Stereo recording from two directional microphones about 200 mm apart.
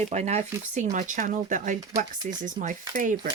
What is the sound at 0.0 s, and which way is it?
Speech, 35° right (ahead or behind).